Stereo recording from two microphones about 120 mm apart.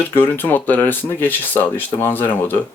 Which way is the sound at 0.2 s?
15° left (ahead or behind).